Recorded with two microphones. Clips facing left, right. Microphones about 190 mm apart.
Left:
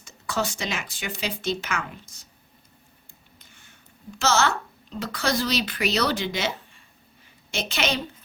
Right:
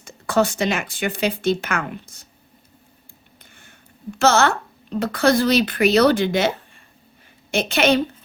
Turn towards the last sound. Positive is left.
turn(degrees=-55)  # may be behind; listen again after turning